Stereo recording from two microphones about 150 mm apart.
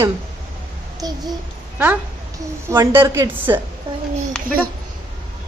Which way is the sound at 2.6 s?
20° right (ahead or behind).